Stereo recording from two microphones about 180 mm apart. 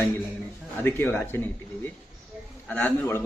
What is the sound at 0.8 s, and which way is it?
A man's voice, 10° left (ahead or behind).